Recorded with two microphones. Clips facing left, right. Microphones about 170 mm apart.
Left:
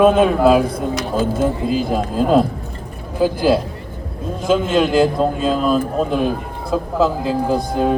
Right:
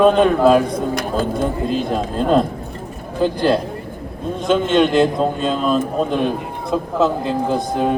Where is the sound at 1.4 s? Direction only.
5° left (ahead or behind).